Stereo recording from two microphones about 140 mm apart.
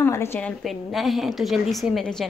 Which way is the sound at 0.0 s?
15° left (ahead or behind).